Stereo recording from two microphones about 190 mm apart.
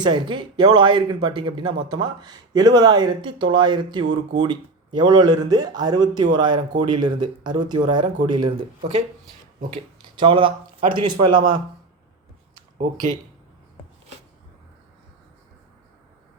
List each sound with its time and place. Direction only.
0.0 s speech: 25° right (ahead or behind)
10.2 s speech: 25° right (ahead or behind)